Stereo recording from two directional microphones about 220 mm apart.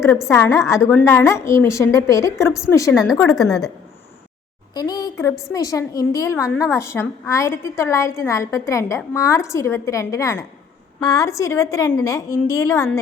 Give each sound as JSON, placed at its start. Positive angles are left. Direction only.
{"t": 0.3, "sound": "a woman's voice", "side_deg": 10}
{"t": 2.9, "sound": "speech", "side_deg": 0}
{"t": 4.7, "sound": "a woman's voice", "side_deg": 20}